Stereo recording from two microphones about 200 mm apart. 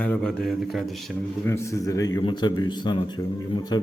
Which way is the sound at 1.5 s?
15° left (ahead or behind).